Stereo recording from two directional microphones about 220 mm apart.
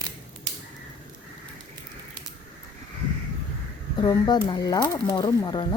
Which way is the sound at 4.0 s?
20° left (ahead or behind).